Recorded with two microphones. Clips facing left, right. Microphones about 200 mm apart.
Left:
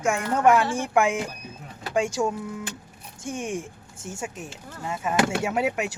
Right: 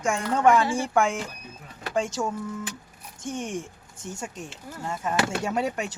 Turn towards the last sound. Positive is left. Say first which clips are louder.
# left 2 dB
turn(degrees=5)  # may be behind; listen again after turning